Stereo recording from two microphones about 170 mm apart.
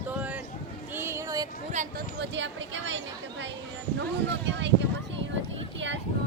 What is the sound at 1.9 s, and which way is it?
Speech, 90° right.